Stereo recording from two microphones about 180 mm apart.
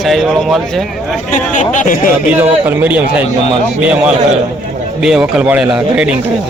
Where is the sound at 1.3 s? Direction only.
45° left (ahead or behind).